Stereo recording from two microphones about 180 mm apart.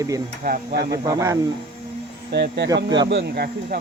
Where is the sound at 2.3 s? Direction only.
70° right (ahead or behind).